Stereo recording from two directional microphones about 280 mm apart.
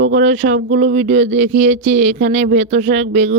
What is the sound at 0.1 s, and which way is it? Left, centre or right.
Speech, right.